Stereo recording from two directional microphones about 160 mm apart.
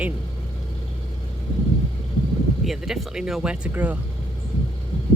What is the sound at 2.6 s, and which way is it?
Speech, centre (ahead or behind).